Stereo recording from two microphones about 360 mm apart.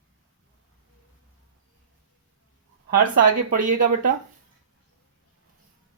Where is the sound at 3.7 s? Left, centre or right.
Right.